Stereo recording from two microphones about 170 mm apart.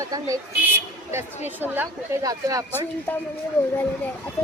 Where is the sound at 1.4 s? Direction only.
10° right (ahead or behind).